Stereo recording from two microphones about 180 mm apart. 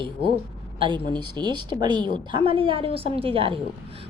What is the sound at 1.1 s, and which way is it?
A woman's voice, 25° right (ahead or behind).